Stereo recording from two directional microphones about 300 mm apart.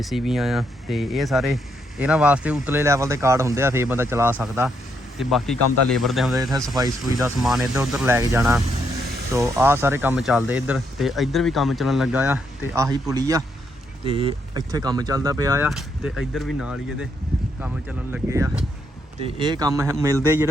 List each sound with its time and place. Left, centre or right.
0.0 s speech: centre